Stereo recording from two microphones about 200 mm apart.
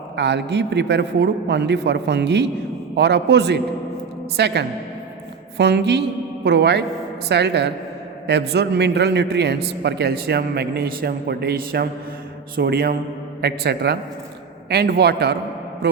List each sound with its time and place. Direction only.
0.2 s a man's voice: 60° right (ahead or behind)